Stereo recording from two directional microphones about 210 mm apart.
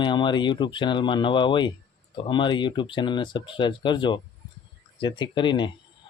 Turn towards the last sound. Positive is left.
turn(degrees=20)  # may be behind; listen again after turning